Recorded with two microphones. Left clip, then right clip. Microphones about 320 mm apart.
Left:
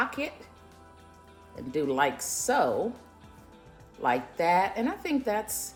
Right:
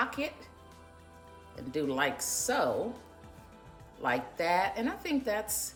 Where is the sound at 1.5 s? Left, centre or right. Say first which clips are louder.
Left 4 dB; centre.